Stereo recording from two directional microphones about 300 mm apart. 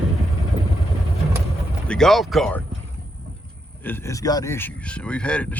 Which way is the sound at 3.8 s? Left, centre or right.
Centre.